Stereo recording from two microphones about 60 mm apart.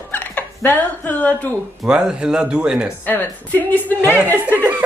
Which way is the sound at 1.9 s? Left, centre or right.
Centre.